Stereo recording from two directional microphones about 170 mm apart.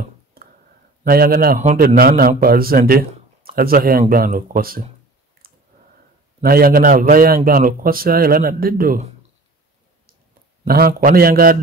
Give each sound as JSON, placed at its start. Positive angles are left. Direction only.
{"t": 0.4, "sound": "a sound", "side_deg": -60}
{"t": 1.0, "sound": "a man's voice", "side_deg": -65}
{"t": 5.4, "sound": "clicking", "side_deg": -60}
{"t": 6.4, "sound": "a man's voice", "side_deg": -60}
{"t": 10.7, "sound": "a man's voice", "side_deg": -60}